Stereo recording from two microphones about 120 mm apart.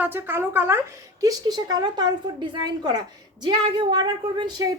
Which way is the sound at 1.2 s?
30° right (ahead or behind).